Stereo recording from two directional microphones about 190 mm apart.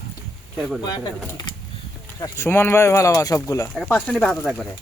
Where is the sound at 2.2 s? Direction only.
15° left (ahead or behind).